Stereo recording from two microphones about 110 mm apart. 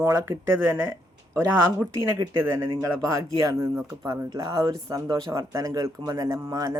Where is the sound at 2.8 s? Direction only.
35° right (ahead or behind).